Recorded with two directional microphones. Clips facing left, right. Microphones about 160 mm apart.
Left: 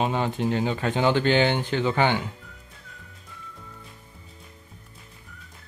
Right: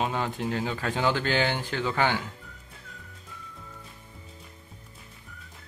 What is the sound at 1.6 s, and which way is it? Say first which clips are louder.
Speech: left 5 dB; 25° left (ahead or behind).